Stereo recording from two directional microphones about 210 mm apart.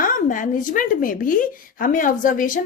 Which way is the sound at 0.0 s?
40° left (ahead or behind).